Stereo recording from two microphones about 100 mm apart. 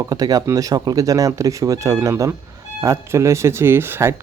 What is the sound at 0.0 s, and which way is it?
Speech, 40° right (ahead or behind).